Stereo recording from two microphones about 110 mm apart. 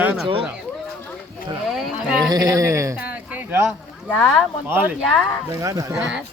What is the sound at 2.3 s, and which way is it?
Speech, 35° right (ahead or behind).